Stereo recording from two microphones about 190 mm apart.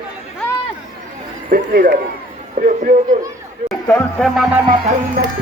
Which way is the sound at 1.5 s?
50° right (ahead or behind).